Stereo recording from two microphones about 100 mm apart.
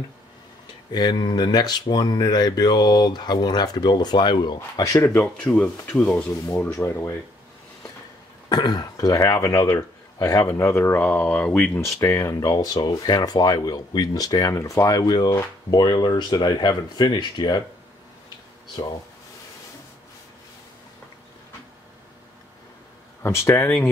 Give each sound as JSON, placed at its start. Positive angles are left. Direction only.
{"t": 0.9, "sound": "speech", "side_deg": 45}
{"t": 4.7, "sound": "speech", "side_deg": 35}
{"t": 5.0, "sound": "speech", "side_deg": 15}
{"t": 8.5, "sound": "speech", "side_deg": 45}
{"t": 11.8, "sound": "speech", "side_deg": 25}
{"t": 18.8, "sound": "speech", "side_deg": 50}
{"t": 23.2, "sound": "speech", "side_deg": 25}